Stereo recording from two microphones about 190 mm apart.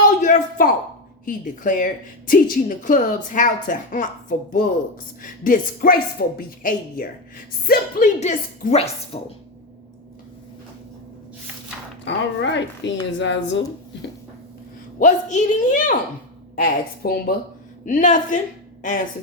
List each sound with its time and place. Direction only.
0.2 s a woman's voice: 40° left (ahead or behind)
8.2 s a woman's voice: 40° left (ahead or behind)
12.0 s speech: 70° left (ahead or behind)
14.9 s a woman's voice: 40° left (ahead or behind)
16.6 s a woman's voice: 55° left (ahead or behind)
17.8 s a woman's voice: 40° left (ahead or behind)